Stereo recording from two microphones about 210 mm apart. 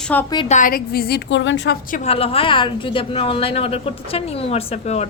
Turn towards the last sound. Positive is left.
turn(degrees=30)  # may be behind; listen again after turning